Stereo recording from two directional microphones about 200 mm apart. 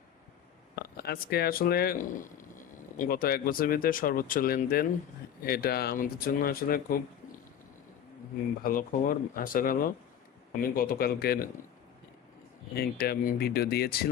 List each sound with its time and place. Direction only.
0.9 s speech: 50° left (ahead or behind)
8.6 s speech: 45° left (ahead or behind)
12.7 s speech: 50° left (ahead or behind)